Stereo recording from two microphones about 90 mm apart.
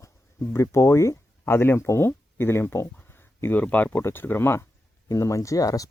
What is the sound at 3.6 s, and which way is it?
Speech, 15° left (ahead or behind).